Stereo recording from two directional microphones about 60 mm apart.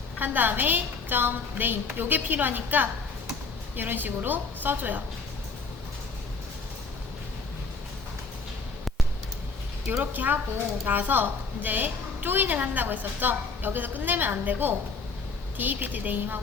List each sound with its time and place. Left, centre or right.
0.2 s a woman's voice: right
10.0 s a woman's voice: right